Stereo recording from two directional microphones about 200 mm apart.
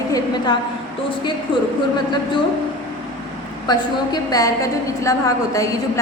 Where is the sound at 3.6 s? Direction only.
20° left (ahead or behind).